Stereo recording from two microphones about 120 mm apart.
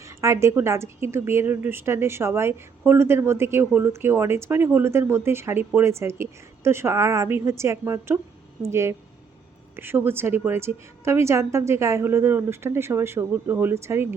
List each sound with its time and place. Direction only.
0.2 s a woman's voice: 25° right (ahead or behind)